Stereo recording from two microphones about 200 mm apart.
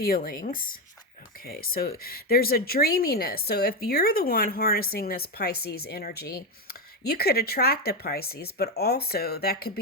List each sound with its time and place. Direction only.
0.0 s speech: 45° left (ahead or behind)